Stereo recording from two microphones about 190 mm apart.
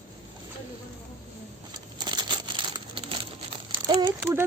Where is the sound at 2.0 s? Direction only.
25° right (ahead or behind).